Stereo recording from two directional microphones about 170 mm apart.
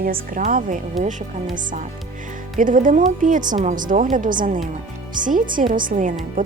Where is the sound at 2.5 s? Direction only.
50° right (ahead or behind).